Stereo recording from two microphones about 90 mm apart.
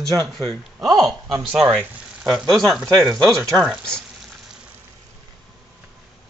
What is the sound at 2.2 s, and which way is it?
Speech, 5° right (ahead or behind).